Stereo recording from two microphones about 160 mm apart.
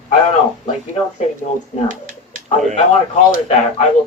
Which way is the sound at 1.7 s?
45° left (ahead or behind).